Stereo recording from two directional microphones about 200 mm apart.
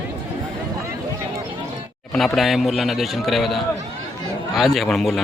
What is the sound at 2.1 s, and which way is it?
Speech, centre (ahead or behind).